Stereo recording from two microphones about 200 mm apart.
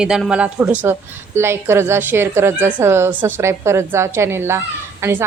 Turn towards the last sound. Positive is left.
turn(degrees=-15)  # may be behind; listen again after turning